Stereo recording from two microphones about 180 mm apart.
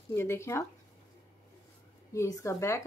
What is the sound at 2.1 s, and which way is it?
Speech, 15° left (ahead or behind).